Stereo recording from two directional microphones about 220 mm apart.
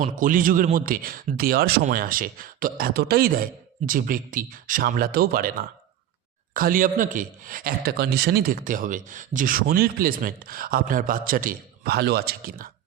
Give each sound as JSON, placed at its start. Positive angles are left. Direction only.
{"t": 0.0, "sound": "speech", "side_deg": -35}
{"t": 6.5, "sound": "speech", "side_deg": -40}